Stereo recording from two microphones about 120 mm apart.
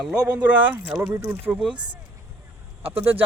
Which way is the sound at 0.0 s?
5° right (ahead or behind).